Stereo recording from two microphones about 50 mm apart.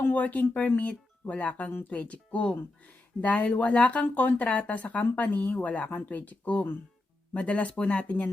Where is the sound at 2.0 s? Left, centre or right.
Left.